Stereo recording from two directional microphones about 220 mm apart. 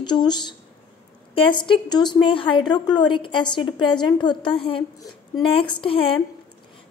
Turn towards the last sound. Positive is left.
turn(degrees=25)  # may be behind; listen again after turning